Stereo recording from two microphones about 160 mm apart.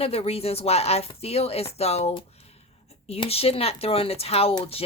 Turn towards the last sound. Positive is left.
turn(degrees=40)  # may be behind; listen again after turning